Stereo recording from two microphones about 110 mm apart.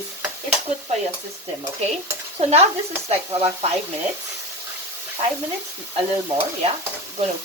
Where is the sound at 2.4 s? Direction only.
70° right (ahead or behind).